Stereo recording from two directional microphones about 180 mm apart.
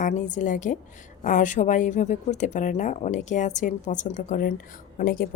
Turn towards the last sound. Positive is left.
turn(degrees=55)  # may be behind; listen again after turning